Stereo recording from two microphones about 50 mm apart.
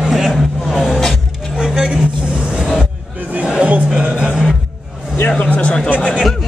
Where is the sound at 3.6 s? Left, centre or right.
Right.